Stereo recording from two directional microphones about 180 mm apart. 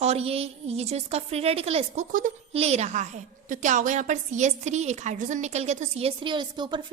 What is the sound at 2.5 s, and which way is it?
A woman's voice, 35° right (ahead or behind).